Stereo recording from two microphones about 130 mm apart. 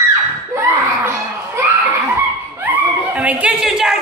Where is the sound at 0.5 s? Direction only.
20° right (ahead or behind).